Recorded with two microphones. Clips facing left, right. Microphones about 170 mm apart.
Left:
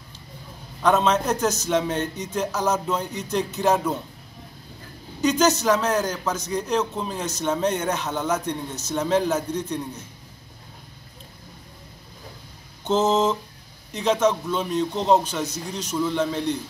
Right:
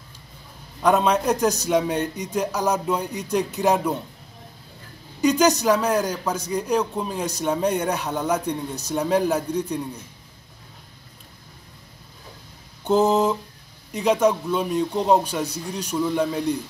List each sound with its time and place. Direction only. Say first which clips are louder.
0.8 s speech: right 1 dB; 10° right (ahead or behind)
5.4 s speech: even; 15° right (ahead or behind)
12.8 s speech: right 2 dB; 10° right (ahead or behind)